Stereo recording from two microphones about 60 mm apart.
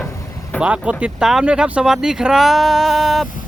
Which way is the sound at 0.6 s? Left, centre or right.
Right.